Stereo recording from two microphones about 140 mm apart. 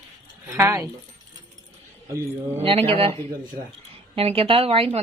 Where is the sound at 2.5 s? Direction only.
40° right (ahead or behind).